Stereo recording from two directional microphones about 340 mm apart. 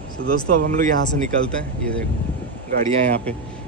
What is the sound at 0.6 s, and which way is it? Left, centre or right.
Speech, right.